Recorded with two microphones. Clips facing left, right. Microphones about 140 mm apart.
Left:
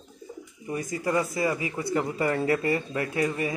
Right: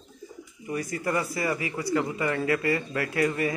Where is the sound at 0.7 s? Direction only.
20° left (ahead or behind).